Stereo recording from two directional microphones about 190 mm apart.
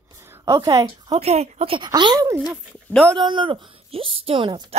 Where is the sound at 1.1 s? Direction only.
35° right (ahead or behind).